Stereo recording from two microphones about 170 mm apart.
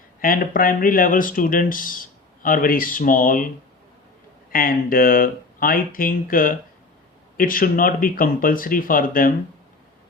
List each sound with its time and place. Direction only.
0.2 s speech: 55° left (ahead or behind)
4.5 s speech: 55° left (ahead or behind)